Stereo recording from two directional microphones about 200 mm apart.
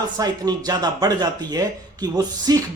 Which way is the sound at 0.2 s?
20° right (ahead or behind).